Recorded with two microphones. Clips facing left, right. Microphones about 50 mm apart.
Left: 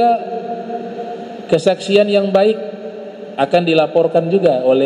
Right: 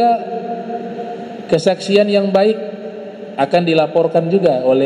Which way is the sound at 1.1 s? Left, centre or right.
Centre.